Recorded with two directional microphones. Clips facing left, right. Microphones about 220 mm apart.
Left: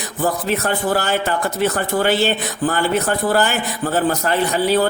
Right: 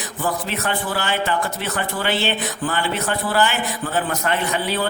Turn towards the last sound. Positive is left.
turn(degrees=40)  # may be behind; listen again after turning